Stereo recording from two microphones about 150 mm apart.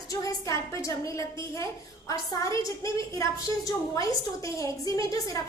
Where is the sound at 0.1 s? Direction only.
20° left (ahead or behind).